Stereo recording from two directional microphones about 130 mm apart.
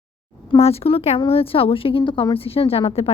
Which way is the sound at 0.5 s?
50° left (ahead or behind).